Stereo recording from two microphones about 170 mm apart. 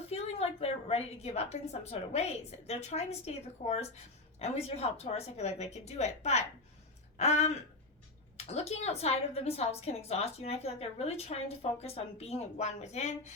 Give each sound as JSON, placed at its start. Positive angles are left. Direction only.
{"t": 0.1, "sound": "a woman's voice", "side_deg": 35}